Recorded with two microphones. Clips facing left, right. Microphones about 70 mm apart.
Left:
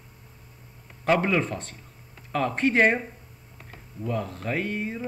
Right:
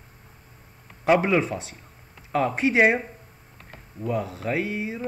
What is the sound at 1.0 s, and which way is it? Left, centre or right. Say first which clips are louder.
Speech: right 3 dB; centre.